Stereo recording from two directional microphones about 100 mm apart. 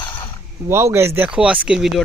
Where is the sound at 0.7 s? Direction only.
25° right (ahead or behind).